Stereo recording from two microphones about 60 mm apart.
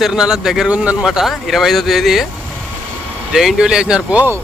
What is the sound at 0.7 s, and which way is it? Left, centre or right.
Speech, right.